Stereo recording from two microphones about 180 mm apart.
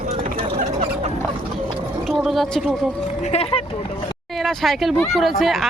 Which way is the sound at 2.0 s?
Centre (ahead or behind).